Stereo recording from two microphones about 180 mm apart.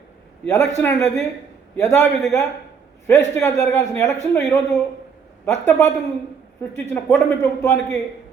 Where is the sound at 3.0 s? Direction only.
15° left (ahead or behind).